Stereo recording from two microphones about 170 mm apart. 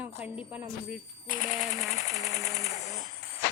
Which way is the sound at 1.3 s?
50° left (ahead or behind).